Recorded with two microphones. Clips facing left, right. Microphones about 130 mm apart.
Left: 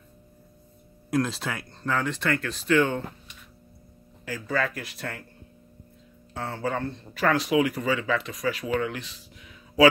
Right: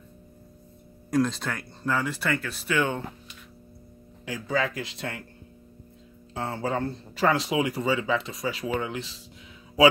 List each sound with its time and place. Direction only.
1.1 s speech: centre (ahead or behind)
4.3 s speech: 20° right (ahead or behind)
6.3 s speech: 25° right (ahead or behind)